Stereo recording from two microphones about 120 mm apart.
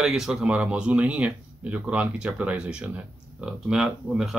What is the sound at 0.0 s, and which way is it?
Speech, 5° right (ahead or behind).